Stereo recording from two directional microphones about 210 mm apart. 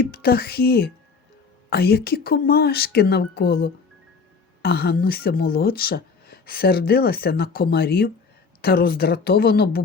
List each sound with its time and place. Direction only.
0.0 s speech: 45° left (ahead or behind)